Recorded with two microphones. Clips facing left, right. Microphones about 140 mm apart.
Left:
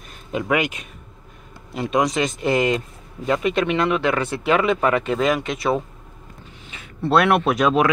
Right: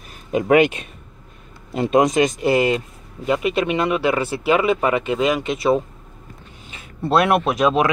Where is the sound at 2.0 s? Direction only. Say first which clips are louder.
Right 5 dB; 45° right (ahead or behind).